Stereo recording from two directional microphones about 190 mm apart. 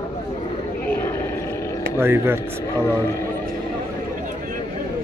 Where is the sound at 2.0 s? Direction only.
10° right (ahead or behind).